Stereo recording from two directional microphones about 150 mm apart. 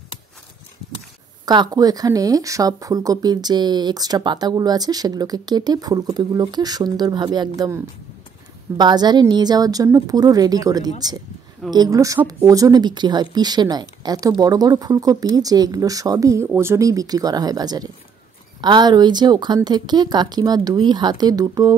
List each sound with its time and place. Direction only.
1.4 s speech: 25° right (ahead or behind)